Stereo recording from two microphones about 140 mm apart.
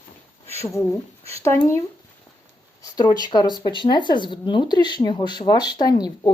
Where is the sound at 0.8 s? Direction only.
20° left (ahead or behind).